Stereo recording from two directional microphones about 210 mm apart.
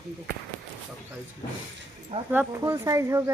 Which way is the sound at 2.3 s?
10° right (ahead or behind).